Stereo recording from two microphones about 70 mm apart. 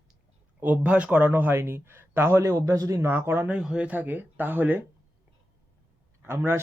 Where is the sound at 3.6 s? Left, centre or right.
Centre.